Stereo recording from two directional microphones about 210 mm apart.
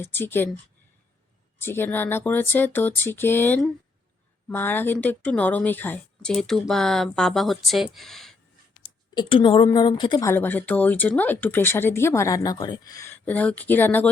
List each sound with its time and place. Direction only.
0.0 s speech: 10° left (ahead or behind)
1.6 s speech: 10° left (ahead or behind)
9.1 s a woman's voice: 25° left (ahead or behind)